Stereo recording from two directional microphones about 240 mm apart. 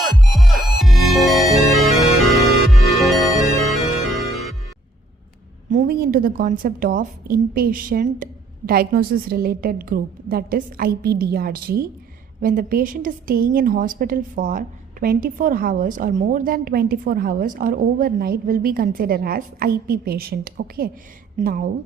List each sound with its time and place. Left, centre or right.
0.0 s music: centre
5.7 s a woman's voice: right